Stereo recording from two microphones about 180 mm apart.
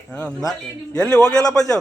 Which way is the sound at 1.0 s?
5° left (ahead or behind).